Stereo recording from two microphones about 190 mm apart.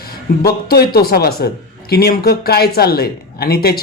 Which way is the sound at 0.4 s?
55° left (ahead or behind).